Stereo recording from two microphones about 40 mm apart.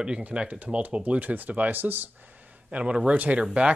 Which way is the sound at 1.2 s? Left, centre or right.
Right.